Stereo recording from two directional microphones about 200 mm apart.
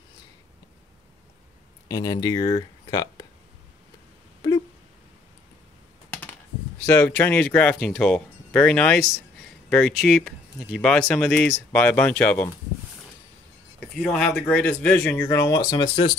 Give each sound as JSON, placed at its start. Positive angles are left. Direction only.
{"t": 1.9, "sound": "speech", "side_deg": 20}
{"t": 6.9, "sound": "speech", "side_deg": 10}
{"t": 13.9, "sound": "speech", "side_deg": 5}